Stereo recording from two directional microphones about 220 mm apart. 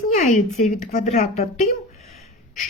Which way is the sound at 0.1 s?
35° left (ahead or behind).